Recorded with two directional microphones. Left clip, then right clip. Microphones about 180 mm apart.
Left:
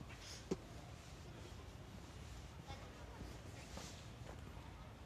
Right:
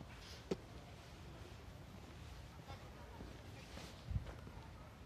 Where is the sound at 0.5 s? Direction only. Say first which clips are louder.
Right 1 dB; 25° right (ahead or behind).